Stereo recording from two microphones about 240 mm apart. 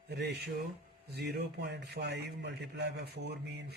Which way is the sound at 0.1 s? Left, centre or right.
Right.